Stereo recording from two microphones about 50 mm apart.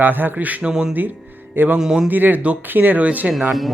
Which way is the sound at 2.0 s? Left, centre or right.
Right.